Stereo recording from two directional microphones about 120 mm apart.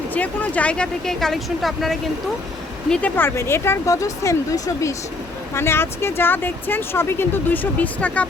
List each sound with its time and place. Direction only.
0.1 s speech: 15° left (ahead or behind)
2.9 s speech: 15° left (ahead or behind)